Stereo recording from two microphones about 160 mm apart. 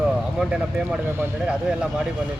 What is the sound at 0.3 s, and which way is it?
Speech, 5° right (ahead or behind).